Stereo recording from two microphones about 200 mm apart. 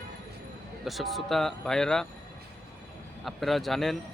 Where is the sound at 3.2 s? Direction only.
Centre (ahead or behind).